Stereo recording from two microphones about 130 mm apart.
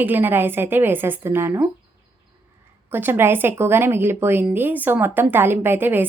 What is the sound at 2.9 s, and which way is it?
A woman's voice, 15° right (ahead or behind).